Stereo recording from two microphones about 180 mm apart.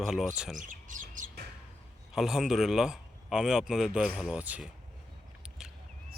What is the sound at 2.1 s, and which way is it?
A man's voice, centre (ahead or behind).